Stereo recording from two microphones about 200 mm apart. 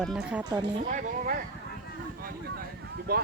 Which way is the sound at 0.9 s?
40° right (ahead or behind).